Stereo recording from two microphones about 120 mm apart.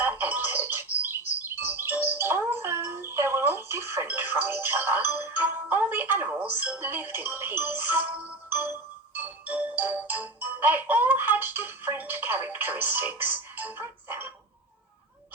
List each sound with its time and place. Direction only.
0.0 s music: 15° right (ahead or behind)